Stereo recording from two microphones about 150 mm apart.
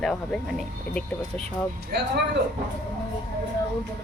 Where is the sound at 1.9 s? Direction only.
90° right.